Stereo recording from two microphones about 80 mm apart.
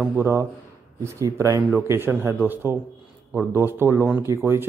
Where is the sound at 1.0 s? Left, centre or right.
Right.